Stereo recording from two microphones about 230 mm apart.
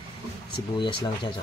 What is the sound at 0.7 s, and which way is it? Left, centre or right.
Speech, centre.